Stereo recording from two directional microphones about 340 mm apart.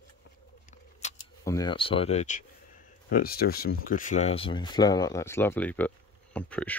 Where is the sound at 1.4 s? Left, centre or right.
Centre.